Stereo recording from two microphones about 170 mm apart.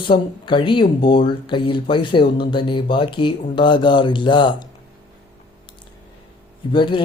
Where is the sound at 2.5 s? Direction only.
30° left (ahead or behind).